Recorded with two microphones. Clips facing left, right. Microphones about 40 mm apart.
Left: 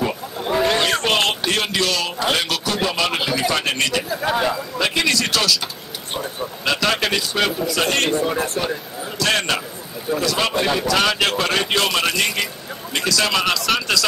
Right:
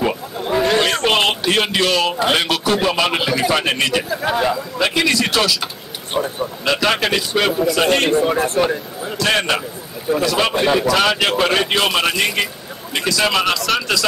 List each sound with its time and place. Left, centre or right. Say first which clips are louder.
0.4 s a sound: right 2 dB; centre
1.5 s a man's voice: right 4 dB; right
4.1 s a man's voice: right 2 dB; centre
6.6 s a man's voice: right 2 dB; centre
8.3 s speech: right 5 dB; right
9.2 s a man's voice: right 2 dB; centre